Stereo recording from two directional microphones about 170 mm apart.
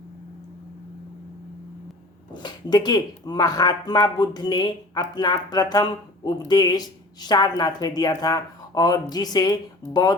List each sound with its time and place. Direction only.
2.3 s speech: 25° left (ahead or behind)